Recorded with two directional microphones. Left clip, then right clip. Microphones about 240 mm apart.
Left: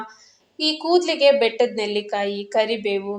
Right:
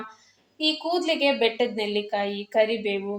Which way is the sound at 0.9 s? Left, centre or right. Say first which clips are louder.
Left 10 dB; left.